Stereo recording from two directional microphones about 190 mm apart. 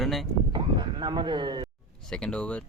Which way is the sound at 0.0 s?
Centre (ahead or behind).